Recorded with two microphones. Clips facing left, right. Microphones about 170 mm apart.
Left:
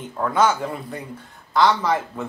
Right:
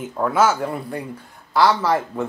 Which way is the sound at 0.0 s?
5° right (ahead or behind).